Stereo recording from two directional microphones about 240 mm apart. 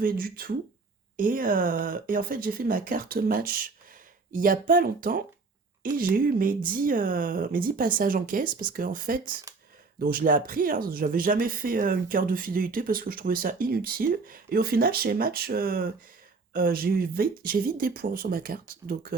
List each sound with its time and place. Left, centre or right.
0.0 s speech: right
9.2 s speech: centre
10.0 s speech: right